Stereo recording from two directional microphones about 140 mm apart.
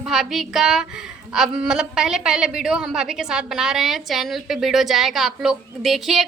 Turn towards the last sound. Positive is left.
turn(degrees=0)  # may be behind; listen again after turning